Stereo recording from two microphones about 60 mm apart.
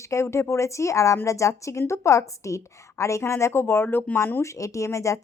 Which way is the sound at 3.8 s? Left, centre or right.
Left.